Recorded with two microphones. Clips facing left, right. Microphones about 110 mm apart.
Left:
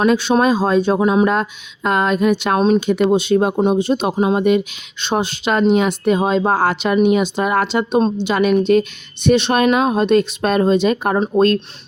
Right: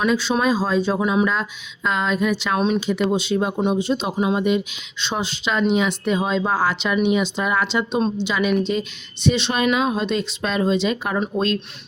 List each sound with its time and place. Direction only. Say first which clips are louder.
0.0 s speech: left 5 dB; 55° left (ahead or behind)
2.6 s speech: left 6 dB; 40° left (ahead or behind)
2.8 s speech: left 6 dB; 55° left (ahead or behind)